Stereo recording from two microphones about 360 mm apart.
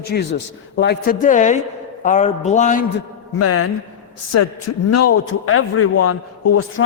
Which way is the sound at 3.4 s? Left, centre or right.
Left.